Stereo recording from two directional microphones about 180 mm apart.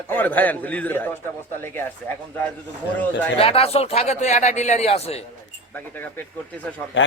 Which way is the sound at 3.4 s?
35° left (ahead or behind).